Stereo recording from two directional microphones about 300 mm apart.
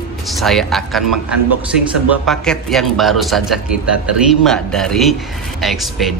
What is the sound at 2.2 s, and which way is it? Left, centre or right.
Speech, centre.